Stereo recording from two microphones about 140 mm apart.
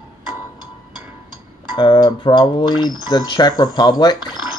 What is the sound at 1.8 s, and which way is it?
Speech, 30° left (ahead or behind).